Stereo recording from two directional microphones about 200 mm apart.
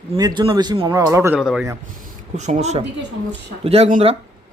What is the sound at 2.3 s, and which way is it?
A man's voice, 35° right (ahead or behind).